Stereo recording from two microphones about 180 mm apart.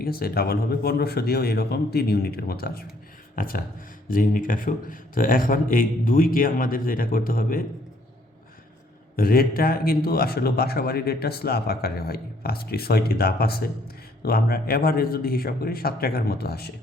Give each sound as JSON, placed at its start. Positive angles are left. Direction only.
{"t": 0.0, "sound": "a man's voice", "side_deg": 55}
{"t": 9.1, "sound": "speech", "side_deg": 55}